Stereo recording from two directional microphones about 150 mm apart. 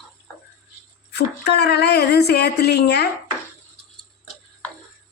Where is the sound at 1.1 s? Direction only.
90° left.